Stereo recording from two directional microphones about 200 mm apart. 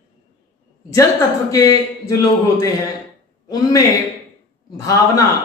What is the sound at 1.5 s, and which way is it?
Speech, 15° left (ahead or behind).